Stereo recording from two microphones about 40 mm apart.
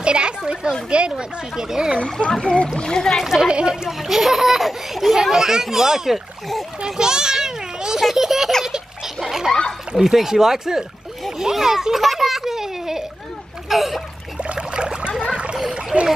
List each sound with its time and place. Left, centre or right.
0.0 s speech: right
1.1 s a child's voice: centre
2.0 s speech: centre
3.4 s speech: right
4.1 s a child's voice: centre
14.4 s a sound: right
15.5 s splash: right